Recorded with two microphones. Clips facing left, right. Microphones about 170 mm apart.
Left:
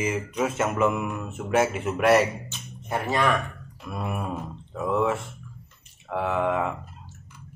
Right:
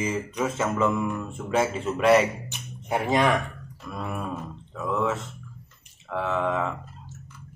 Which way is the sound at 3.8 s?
15° left (ahead or behind).